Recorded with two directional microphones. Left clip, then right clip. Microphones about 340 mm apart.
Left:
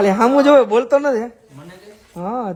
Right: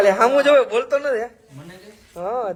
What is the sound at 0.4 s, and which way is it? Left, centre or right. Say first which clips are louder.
Speech: left 3 dB; centre.